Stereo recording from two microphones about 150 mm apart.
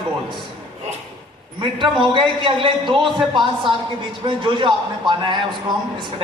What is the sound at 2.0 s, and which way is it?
Speech, 30° right (ahead or behind).